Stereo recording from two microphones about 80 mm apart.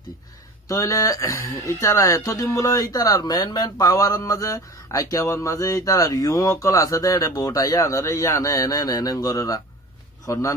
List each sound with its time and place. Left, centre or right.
0.7 s speech: left